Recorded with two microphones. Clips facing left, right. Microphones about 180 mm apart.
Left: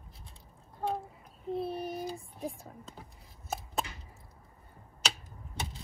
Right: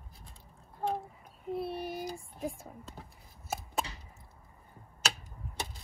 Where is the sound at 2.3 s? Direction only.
Centre (ahead or behind).